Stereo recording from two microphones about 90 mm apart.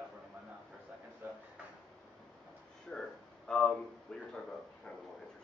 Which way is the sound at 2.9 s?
5° left (ahead or behind).